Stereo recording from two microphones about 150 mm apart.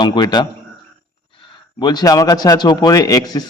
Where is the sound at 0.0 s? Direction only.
30° left (ahead or behind).